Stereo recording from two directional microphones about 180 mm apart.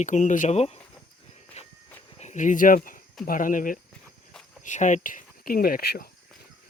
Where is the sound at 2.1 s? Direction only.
40° left (ahead or behind); by 6.1 s 60° left (ahead or behind).